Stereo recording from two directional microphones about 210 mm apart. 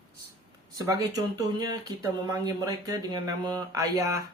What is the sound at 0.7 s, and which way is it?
Speech, 15° right (ahead or behind).